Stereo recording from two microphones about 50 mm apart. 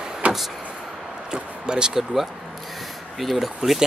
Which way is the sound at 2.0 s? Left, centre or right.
Centre.